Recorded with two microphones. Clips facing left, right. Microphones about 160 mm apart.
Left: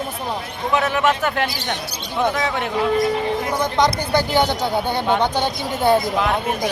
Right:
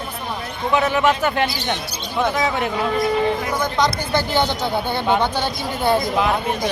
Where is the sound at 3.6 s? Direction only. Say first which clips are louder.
Left 2 dB; 20° left (ahead or behind).